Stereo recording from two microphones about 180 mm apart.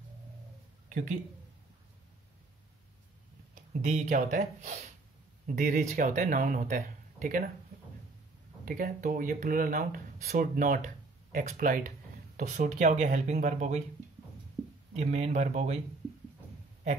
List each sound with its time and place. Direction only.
0.8 s a sound: 45° right (ahead or behind)
3.5 s speech: 45° right (ahead or behind)
8.6 s speech: 50° right (ahead or behind)
15.0 s speech: 35° right (ahead or behind)